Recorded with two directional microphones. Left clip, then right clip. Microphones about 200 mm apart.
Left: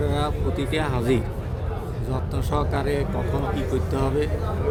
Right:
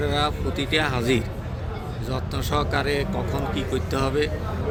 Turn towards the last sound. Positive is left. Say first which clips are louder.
# right 1 dB
turn(degrees=15)  # may be behind; listen again after turning